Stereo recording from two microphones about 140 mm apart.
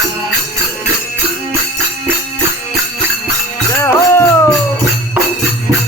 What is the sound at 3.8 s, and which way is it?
Music, 20° left (ahead or behind).